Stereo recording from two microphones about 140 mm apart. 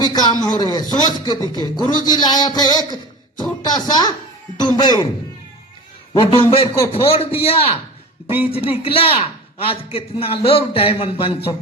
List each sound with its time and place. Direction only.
0.0 s a man's voice: 30° left (ahead or behind)
6.1 s a man's voice: 40° left (ahead or behind)